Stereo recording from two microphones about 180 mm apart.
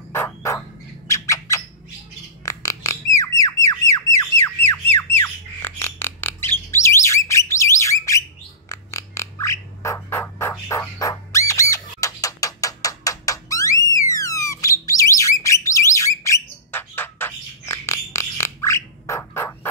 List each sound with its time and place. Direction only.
0.1 s bird: 15° left (ahead or behind)
2.4 s squawk: 20° left (ahead or behind)
8.6 s bird: 15° left (ahead or behind)
10.7 s a sound: 15° left (ahead or behind)
13.8 s bird: 20° left (ahead or behind)